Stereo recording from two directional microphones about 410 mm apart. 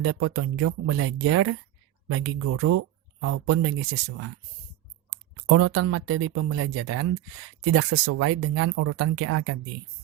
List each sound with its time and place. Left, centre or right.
0.0 s speech: right
5.5 s speech: right